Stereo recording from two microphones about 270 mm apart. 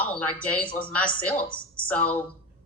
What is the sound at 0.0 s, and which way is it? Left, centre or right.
A woman's voice, centre.